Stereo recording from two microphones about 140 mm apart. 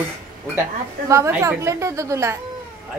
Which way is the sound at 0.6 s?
20° right (ahead or behind).